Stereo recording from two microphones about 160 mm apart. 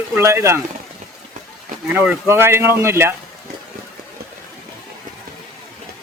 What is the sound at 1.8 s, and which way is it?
Speech, 10° right (ahead or behind).